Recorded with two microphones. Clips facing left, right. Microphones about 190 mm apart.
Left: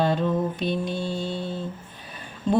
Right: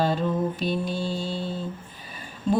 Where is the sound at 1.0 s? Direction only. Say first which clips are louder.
Even; 55° left (ahead or behind).